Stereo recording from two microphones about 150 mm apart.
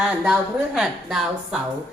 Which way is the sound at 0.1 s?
5° right (ahead or behind).